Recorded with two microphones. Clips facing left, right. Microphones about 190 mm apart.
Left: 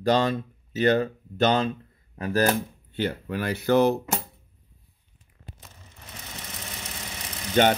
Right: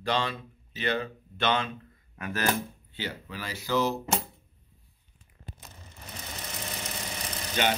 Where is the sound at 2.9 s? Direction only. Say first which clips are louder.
Left 9 dB; 55° left (ahead or behind).